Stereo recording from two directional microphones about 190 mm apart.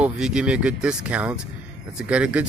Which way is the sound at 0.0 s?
5° right (ahead or behind).